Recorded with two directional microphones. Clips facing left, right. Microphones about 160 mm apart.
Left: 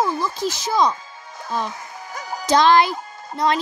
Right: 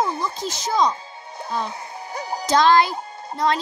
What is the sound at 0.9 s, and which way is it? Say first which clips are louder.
Music: left 1 dB; 30° right (ahead or behind).